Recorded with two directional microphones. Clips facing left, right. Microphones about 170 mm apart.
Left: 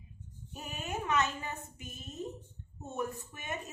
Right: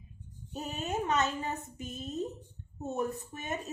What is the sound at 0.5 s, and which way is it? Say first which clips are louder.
Speech: right 5 dB; 35° right (ahead or behind).